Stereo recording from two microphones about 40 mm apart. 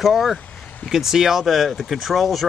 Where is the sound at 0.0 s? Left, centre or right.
Centre.